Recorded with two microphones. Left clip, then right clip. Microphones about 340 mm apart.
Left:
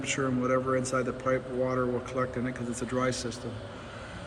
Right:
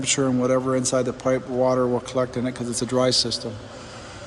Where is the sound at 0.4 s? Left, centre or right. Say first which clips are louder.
Right 6 dB; centre.